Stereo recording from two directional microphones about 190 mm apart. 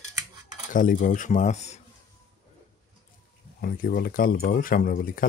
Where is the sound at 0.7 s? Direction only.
45° left (ahead or behind).